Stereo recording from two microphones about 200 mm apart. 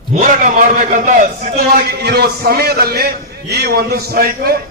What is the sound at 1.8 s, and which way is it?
A man's voice, 55° right (ahead or behind).